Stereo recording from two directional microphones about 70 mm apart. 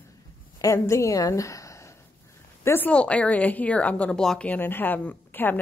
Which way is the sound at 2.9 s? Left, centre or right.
Centre.